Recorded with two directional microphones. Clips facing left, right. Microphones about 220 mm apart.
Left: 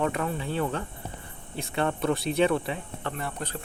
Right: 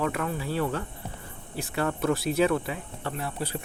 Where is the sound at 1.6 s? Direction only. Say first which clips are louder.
Left 1 dB; 25° left (ahead or behind).